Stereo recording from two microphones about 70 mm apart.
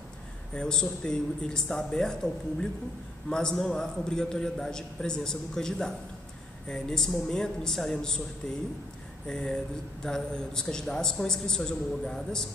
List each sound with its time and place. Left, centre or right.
0.6 s a man's voice: centre
9.3 s a man's voice: centre